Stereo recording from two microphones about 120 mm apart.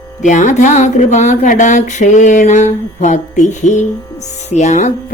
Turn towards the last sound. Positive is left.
turn(degrees=85)